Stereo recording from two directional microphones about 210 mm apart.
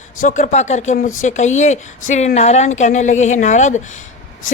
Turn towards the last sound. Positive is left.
turn(degrees=35)  # may be behind; listen again after turning